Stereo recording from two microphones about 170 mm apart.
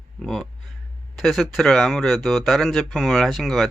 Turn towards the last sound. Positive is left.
turn(degrees=0)  # may be behind; listen again after turning